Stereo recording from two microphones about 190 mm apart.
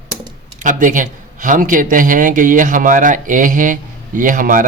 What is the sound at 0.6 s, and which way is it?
A man's voice, 40° right (ahead or behind).